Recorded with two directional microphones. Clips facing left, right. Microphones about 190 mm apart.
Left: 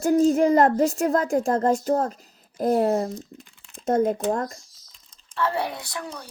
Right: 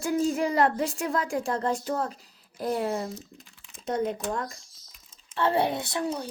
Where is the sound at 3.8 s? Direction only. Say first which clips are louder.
Left 7 dB; 45° left (ahead or behind).